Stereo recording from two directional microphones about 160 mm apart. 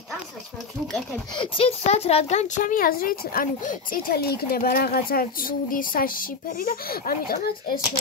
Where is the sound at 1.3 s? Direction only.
35° left (ahead or behind).